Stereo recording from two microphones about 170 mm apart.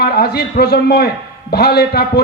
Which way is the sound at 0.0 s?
70° left (ahead or behind).